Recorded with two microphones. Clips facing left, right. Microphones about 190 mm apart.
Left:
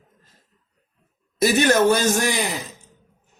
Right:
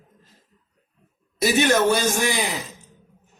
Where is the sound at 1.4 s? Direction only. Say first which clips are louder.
Left 2 dB; 40° left (ahead or behind).